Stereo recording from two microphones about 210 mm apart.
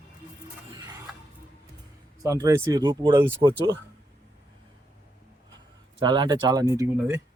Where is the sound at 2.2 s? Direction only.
15° right (ahead or behind).